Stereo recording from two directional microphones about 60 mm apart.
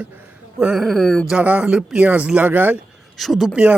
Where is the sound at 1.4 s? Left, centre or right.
Right.